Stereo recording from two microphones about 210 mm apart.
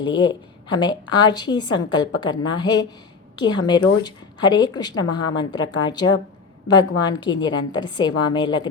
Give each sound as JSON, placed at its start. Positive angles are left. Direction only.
{"t": 0.0, "sound": "speech", "side_deg": 20}